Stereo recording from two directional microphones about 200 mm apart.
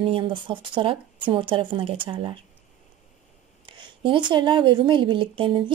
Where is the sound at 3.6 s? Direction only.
25° right (ahead or behind).